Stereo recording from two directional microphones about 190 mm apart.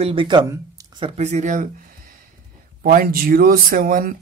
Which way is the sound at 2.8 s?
50° right (ahead or behind).